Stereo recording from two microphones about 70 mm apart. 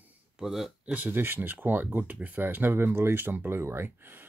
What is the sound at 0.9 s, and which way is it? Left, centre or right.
Speech, right.